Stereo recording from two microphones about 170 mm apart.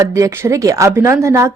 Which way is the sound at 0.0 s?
20° right (ahead or behind).